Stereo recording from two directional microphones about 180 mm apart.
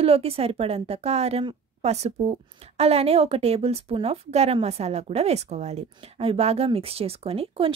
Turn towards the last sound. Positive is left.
turn(degrees=-30)  # may be behind; listen again after turning